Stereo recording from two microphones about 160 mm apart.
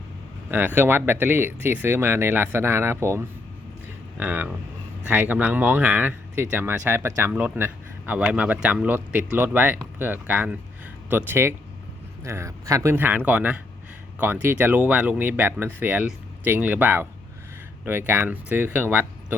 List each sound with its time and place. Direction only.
0.5 s speech: 10° right (ahead or behind)